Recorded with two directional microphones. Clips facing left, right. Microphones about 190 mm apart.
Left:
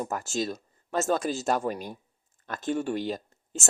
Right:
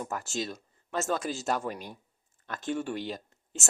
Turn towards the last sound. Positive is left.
turn(degrees=40)  # may be behind; listen again after turning